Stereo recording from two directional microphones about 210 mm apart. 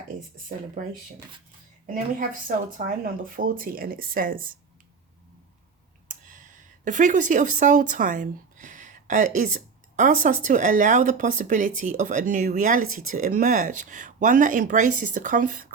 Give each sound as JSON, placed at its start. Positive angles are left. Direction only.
{"t": 2.7, "sound": "speech", "side_deg": -40}
{"t": 6.1, "sound": "clicking", "side_deg": -40}
{"t": 6.8, "sound": "speech", "side_deg": -40}